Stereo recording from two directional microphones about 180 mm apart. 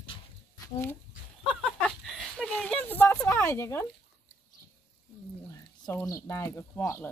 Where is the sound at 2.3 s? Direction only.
5° left (ahead or behind).